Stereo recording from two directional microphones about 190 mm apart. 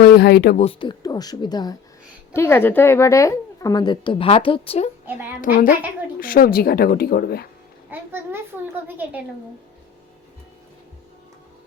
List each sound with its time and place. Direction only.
0.0 s speech: 60° left (ahead or behind)
0.6 s a woman's voice: 30° left (ahead or behind)
6.1 s speech: 50° left (ahead or behind)
7.9 s a child's voice: 10° right (ahead or behind)